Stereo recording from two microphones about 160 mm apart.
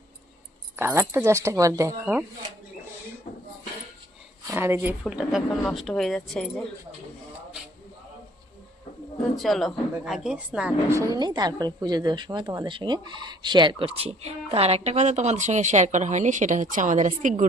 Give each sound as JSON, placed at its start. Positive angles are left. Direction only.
{"t": 0.8, "sound": "speech", "side_deg": -15}
{"t": 4.5, "sound": "speech", "side_deg": -15}
{"t": 9.3, "sound": "speech", "side_deg": 0}
{"t": 10.9, "sound": "a woman's voice", "side_deg": -20}